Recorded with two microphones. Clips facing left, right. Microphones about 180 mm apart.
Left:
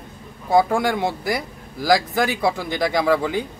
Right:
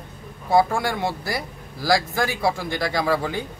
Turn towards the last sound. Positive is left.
turn(degrees=15)  # may be behind; listen again after turning